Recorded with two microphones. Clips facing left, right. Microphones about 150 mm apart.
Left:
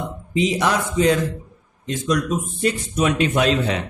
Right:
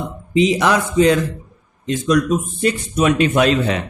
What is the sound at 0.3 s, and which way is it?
A man's voice, 90° right.